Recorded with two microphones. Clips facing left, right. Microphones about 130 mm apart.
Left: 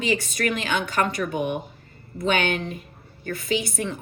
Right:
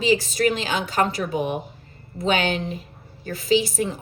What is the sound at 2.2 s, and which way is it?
Speech, 35° right (ahead or behind).